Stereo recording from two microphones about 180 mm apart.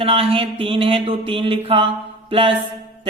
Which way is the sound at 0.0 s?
30° right (ahead or behind).